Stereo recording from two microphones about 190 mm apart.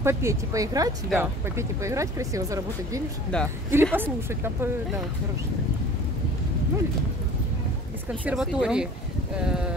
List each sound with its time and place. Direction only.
0.0 s speech: 15° right (ahead or behind)
3.3 s speech: 5° left (ahead or behind)
3.7 s speech: 10° right (ahead or behind)
8.3 s speech: 5° right (ahead or behind)